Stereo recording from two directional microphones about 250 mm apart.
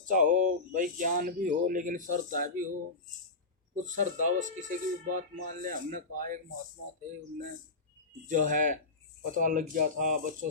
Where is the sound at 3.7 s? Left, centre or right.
Right.